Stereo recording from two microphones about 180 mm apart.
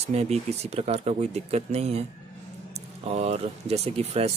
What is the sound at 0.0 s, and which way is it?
Speech, 40° right (ahead or behind).